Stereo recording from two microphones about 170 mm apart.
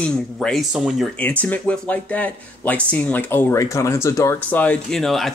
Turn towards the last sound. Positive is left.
turn(degrees=0)  # may be behind; listen again after turning